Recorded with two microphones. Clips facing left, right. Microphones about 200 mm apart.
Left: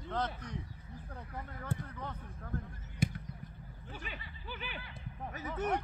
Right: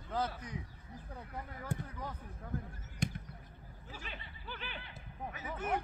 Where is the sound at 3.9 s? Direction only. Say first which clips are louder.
Left 2 dB; centre (ahead or behind).